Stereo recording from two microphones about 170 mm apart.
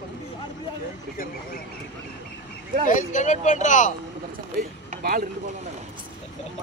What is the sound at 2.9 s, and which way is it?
Speech, 45° left (ahead or behind).